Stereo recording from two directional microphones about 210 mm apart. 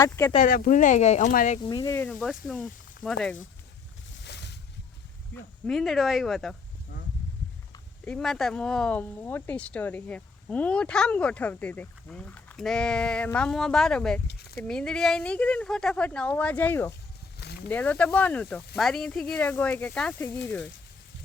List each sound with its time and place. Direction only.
0.0 s speech: 15° left (ahead or behind)
0.3 s speech: 40° left (ahead or behind)
1.6 s speech: 20° left (ahead or behind)
4.2 s boat: 55° left (ahead or behind)
5.3 s speech: centre (ahead or behind)
8.0 s speech: 5° left (ahead or behind)